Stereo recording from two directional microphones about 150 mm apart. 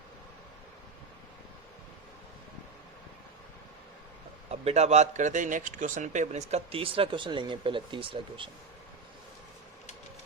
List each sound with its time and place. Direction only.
4.6 s speech: 45° right (ahead or behind)